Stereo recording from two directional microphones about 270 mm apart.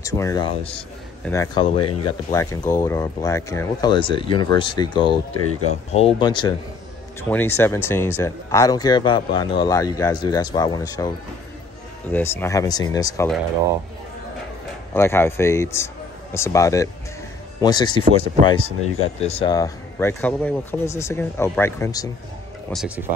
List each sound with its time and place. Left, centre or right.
0.0 s speech: centre
15.0 s speech: centre
22.7 s speech: centre